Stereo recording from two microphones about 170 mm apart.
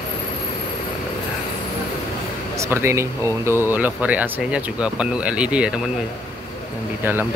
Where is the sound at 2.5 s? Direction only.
15° right (ahead or behind).